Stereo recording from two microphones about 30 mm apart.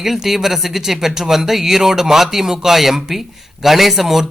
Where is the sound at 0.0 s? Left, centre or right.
Centre.